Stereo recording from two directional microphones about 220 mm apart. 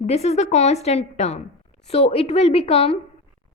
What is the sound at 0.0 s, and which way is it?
A woman's voice, 30° left (ahead or behind).